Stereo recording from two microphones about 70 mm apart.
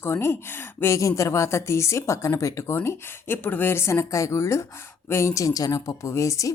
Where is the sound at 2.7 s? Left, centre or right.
Left.